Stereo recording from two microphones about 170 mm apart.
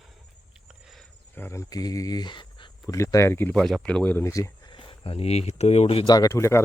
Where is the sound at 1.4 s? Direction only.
15° left (ahead or behind).